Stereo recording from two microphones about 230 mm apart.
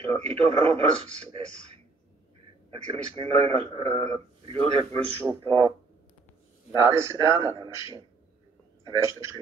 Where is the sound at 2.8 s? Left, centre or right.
Right.